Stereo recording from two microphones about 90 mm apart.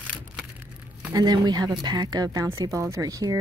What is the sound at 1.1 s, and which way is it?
Speech, 50° right (ahead or behind).